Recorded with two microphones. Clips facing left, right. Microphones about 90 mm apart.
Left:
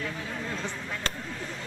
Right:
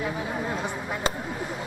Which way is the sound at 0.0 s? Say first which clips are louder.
Right 6 dB; 20° right (ahead or behind).